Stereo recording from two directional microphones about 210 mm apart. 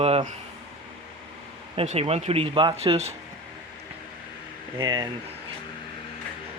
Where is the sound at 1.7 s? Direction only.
30° right (ahead or behind).